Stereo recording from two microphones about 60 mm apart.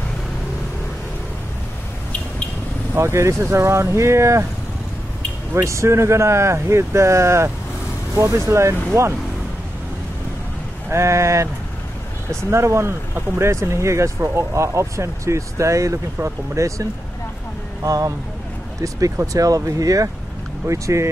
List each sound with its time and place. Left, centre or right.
2.9 s speech: right
5.5 s speech: right
10.9 s speech: right
12.4 s speech: right
17.8 s speech: right
20.6 s speech: right